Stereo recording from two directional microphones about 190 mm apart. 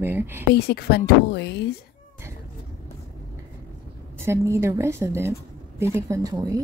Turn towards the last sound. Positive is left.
turn(degrees=-20)  # may be behind; listen again after turning